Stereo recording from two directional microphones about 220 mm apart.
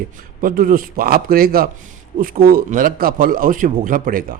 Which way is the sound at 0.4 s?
40° right (ahead or behind).